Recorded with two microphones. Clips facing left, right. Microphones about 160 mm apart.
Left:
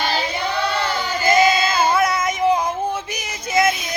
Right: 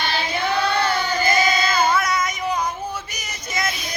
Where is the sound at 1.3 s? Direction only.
25° left (ahead or behind).